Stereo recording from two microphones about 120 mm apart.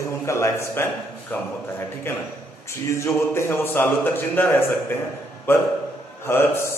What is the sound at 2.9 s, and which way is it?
A man's voice, 25° left (ahead or behind).